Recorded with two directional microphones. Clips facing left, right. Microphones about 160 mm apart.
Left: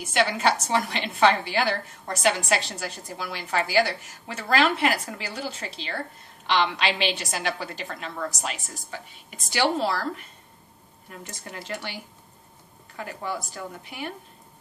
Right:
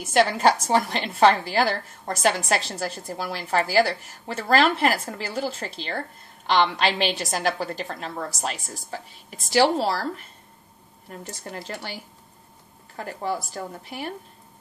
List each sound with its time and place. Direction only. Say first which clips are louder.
0.1 s a woman's voice: right 4 dB; 40° right (ahead or behind)